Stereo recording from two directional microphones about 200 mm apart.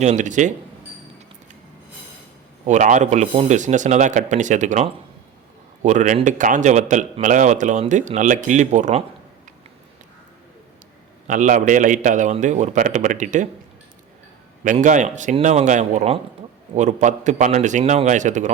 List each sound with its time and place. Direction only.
0.0 s speech: 35° right (ahead or behind)
2.6 s speech: 40° right (ahead or behind)
11.3 s speech: 40° right (ahead or behind)
14.6 s speech: 40° right (ahead or behind)